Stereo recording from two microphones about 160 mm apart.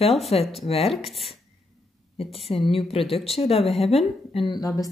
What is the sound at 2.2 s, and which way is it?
Speech, 40° left (ahead or behind).